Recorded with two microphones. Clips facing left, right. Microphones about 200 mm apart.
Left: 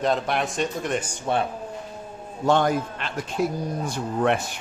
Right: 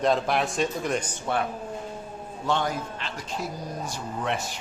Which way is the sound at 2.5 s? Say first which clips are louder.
Left 6 dB; 55° left (ahead or behind).